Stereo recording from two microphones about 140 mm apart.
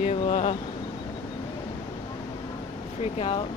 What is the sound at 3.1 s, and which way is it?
Speech, 40° left (ahead or behind).